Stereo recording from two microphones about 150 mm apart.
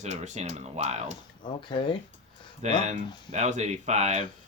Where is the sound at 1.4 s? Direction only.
30° left (ahead or behind).